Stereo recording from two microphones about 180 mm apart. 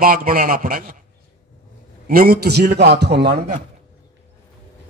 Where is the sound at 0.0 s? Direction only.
50° right (ahead or behind).